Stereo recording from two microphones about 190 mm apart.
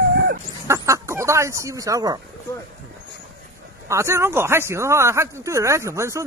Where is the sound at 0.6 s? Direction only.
15° right (ahead or behind).